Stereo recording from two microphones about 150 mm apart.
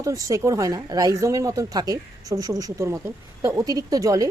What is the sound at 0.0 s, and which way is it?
A woman's voice, 20° right (ahead or behind).